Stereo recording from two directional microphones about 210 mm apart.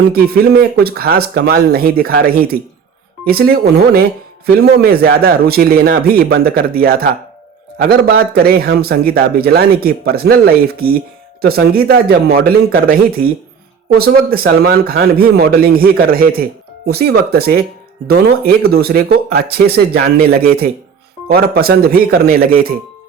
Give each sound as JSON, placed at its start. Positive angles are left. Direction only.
{"t": 0.1, "sound": "a man's voice", "side_deg": -45}